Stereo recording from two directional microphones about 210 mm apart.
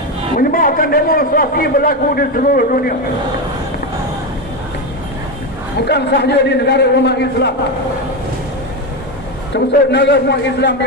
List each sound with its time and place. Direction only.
0.3 s a man's voice: 40° left (ahead or behind)
5.8 s a man's voice: 50° left (ahead or behind)
9.5 s a man's voice: 55° left (ahead or behind)